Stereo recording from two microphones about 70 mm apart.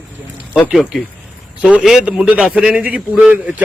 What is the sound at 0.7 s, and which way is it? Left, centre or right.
A man's voice, centre.